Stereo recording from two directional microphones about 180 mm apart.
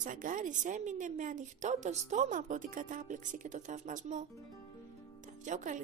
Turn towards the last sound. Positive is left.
turn(degrees=-45)  # may be behind; listen again after turning